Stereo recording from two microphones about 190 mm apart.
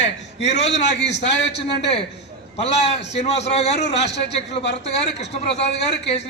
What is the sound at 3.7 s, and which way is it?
Speech, 65° left (ahead or behind).